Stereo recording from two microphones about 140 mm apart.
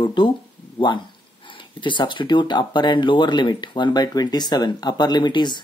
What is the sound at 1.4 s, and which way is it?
Speech, 35° left (ahead or behind).